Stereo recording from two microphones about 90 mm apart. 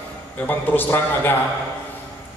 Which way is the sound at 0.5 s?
20° left (ahead or behind).